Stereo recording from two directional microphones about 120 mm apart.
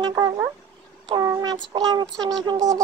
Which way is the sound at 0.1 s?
25° right (ahead or behind).